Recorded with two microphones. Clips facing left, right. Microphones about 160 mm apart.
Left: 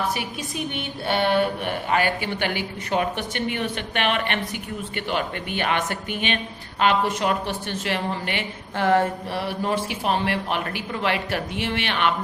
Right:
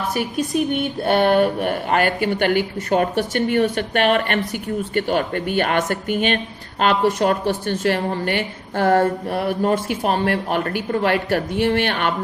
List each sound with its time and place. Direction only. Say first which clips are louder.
0.1 s a woman's voice: right 8 dB; 50° right (ahead or behind)